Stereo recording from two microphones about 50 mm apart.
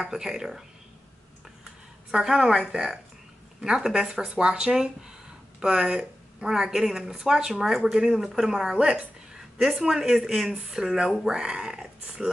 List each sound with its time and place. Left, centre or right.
0.1 s speech: centre
2.0 s speech: centre